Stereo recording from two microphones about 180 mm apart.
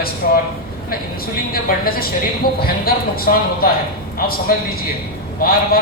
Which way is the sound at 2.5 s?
55° left (ahead or behind).